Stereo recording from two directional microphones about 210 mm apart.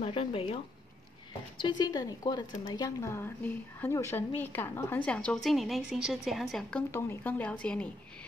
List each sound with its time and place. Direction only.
0.0 s speech: 25° left (ahead or behind)
1.6 s a woman's voice: 20° left (ahead or behind); by 6.8 s centre (ahead or behind)
6.9 s a woman's voice: 10° left (ahead or behind)